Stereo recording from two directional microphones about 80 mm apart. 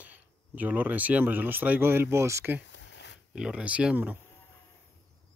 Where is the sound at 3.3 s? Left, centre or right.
Centre.